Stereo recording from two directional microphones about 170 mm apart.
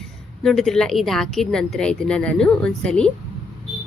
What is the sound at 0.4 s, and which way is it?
Speech, centre (ahead or behind).